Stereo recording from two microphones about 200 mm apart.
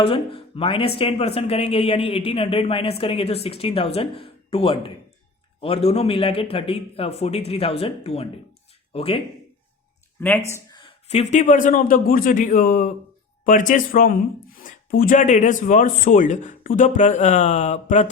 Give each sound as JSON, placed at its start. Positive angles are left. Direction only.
{"t": 0.0, "sound": "speech", "side_deg": 25}
{"t": 10.2, "sound": "speech", "side_deg": 10}
{"t": 10.7, "sound": "speech", "side_deg": 25}